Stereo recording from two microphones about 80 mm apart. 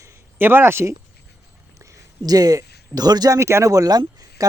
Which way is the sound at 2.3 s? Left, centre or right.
Right.